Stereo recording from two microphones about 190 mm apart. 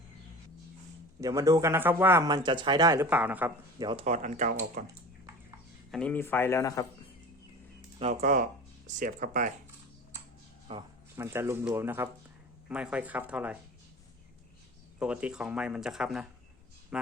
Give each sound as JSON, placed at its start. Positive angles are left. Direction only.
{"t": 1.2, "sound": "speech", "side_deg": -20}
{"t": 3.8, "sound": "speech", "side_deg": -25}
{"t": 4.0, "sound": "speech", "side_deg": -40}
{"t": 5.9, "sound": "speech", "side_deg": 5}
{"t": 8.2, "sound": "speech", "side_deg": -50}
{"t": 10.7, "sound": "speech", "side_deg": -30}
{"t": 11.2, "sound": "speech", "side_deg": -15}
{"t": 14.9, "sound": "speech", "side_deg": -5}